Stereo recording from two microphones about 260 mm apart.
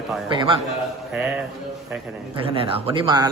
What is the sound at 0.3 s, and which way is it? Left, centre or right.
Speech, centre.